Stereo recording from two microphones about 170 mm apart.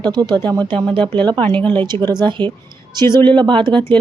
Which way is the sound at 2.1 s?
25° right (ahead or behind).